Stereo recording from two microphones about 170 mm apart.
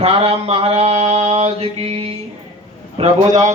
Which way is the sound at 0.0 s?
35° right (ahead or behind).